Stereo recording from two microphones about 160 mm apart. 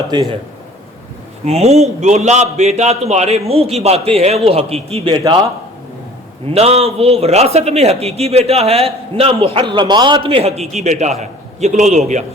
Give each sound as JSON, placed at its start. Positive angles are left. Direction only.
{"t": 0.1, "sound": "a man's voice", "side_deg": -25}
{"t": 1.5, "sound": "a man's voice", "side_deg": -40}
{"t": 5.2, "sound": "a man's voice", "side_deg": -20}
{"t": 6.5, "sound": "a man's voice", "side_deg": -40}